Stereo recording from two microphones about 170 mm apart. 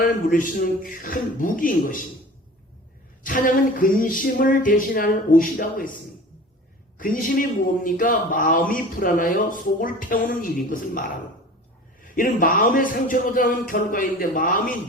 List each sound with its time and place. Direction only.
0.0 s speech: 55° left (ahead or behind)
3.2 s speech: 55° left (ahead or behind)
7.0 s a man's voice: 55° left (ahead or behind)
12.0 s speech: 55° left (ahead or behind)